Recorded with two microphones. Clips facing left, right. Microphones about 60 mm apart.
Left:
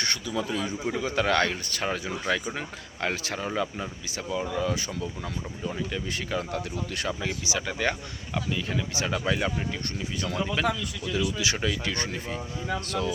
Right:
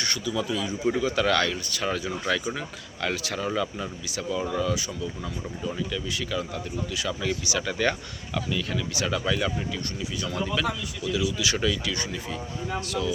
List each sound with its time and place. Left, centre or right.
0.0 s speech: left
1.0 s speech: left
2.2 s speech: centre
2.6 s speech: left
4.7 s speech: left
7.2 s speech: left
8.4 s speech: left
11.0 s speech: left
11.3 s speech: left
11.9 s speech: left